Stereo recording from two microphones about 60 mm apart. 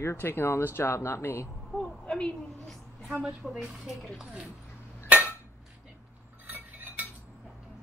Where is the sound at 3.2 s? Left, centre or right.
Centre.